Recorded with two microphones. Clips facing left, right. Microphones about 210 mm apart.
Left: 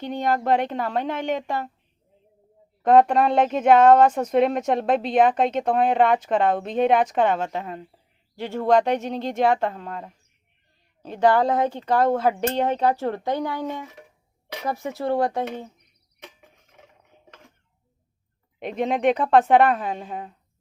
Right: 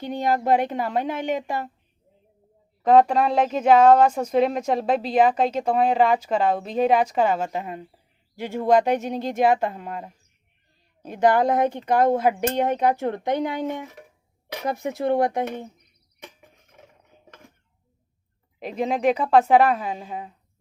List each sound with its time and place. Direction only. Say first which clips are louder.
0.0 s speech: even; 10° right (ahead or behind)
2.8 s speech: even; centre (ahead or behind); by 13.7 s 20° right (ahead or behind)
14.7 s speech: right 2 dB; 20° right (ahead or behind)
18.6 s speech: left 1 dB; centre (ahead or behind)